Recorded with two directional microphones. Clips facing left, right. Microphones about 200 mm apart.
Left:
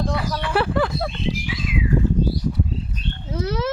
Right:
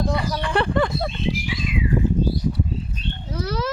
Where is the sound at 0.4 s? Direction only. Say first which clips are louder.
Even; 5° left (ahead or behind).